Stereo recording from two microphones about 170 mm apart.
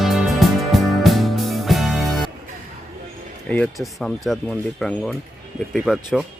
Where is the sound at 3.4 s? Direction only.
5° left (ahead or behind).